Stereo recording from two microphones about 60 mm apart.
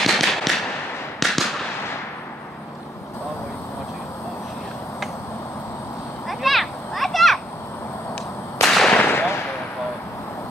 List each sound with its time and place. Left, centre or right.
0.0 s fireworks: centre
1.2 s firecracker: centre
6.2 s children playing: centre
8.6 s whip: centre
9.0 s firecracker: left